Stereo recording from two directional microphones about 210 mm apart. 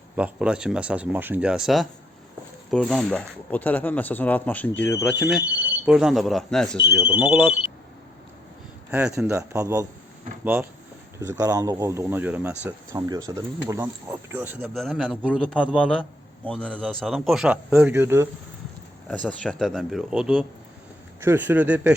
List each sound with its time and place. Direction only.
0.2 s speech: 5° right (ahead or behind); by 5.3 s 15° left (ahead or behind)
5.8 s speech: 5° right (ahead or behind)
8.9 s speech: 5° right (ahead or behind)
19.0 s speech: 5° left (ahead or behind)